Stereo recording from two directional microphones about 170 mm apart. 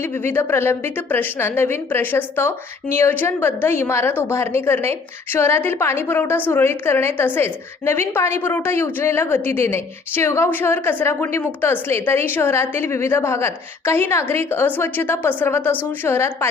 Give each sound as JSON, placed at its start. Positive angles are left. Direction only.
{"t": 0.0, "sound": "a woman's voice", "side_deg": 15}